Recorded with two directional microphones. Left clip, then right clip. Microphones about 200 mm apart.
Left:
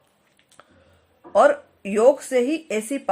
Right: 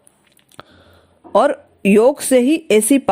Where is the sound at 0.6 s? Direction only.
40° right (ahead or behind).